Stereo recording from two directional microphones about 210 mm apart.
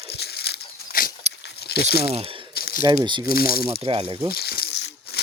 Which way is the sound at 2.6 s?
45° left (ahead or behind).